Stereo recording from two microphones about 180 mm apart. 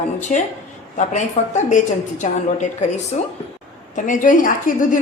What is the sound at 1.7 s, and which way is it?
A woman's voice, 40° left (ahead or behind).